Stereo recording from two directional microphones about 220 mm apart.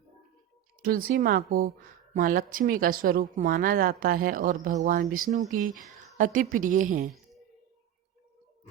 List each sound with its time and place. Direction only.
0.8 s speech: 40° right (ahead or behind)